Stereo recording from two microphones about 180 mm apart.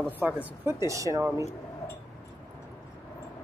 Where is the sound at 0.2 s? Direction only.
10° right (ahead or behind).